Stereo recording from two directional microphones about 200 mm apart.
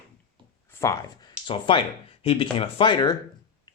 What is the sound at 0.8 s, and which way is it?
Speech, 15° left (ahead or behind).